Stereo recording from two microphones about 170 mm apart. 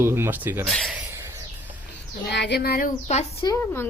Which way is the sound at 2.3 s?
80° left.